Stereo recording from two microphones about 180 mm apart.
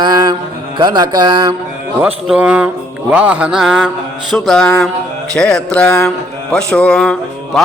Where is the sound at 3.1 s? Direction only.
5° right (ahead or behind).